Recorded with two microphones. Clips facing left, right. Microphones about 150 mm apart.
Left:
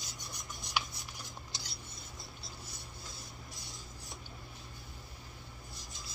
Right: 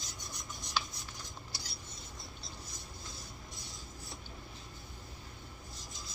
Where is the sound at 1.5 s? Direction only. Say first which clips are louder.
Right 1 dB; 20° left (ahead or behind).